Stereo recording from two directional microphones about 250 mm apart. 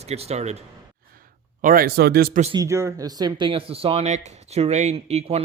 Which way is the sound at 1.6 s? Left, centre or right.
Right.